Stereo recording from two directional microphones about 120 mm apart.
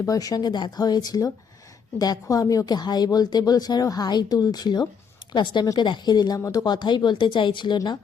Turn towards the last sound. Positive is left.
turn(degrees=40)  # may be behind; listen again after turning